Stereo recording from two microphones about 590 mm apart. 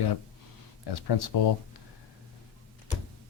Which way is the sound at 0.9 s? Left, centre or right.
Left.